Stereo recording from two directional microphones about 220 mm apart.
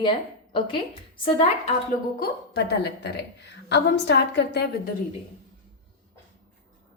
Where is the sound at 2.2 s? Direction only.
45° left (ahead or behind).